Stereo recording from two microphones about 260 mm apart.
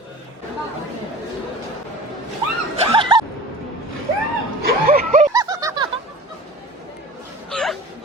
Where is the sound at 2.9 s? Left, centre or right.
Centre.